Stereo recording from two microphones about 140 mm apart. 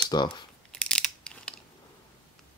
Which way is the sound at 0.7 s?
5° left (ahead or behind).